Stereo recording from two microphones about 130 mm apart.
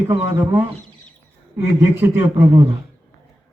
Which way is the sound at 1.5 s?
15° right (ahead or behind).